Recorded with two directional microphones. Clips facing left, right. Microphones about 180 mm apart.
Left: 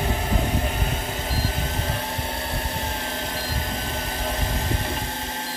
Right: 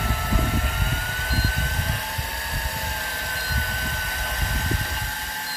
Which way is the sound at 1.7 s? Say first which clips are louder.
Left 4 dB; 25° left (ahead or behind).